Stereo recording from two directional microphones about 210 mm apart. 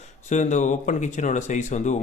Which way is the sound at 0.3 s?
35° left (ahead or behind).